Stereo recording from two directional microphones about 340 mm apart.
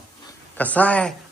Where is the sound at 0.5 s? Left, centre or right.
Centre.